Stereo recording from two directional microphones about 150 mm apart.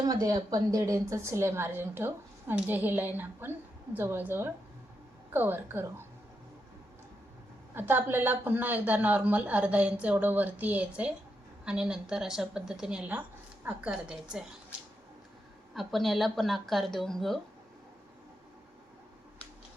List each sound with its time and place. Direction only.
0.1 s a woman's voice: 25° right (ahead or behind)
7.8 s a woman's voice: 15° right (ahead or behind)
15.7 s speech: centre (ahead or behind)